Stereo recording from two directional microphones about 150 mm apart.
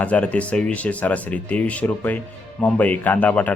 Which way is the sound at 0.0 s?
10° left (ahead or behind).